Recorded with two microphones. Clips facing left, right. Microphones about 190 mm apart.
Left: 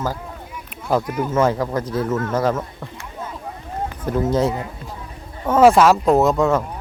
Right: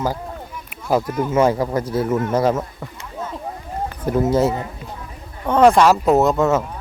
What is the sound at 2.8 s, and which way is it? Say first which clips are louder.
Speech: right 1 dB; 5° right (ahead or behind).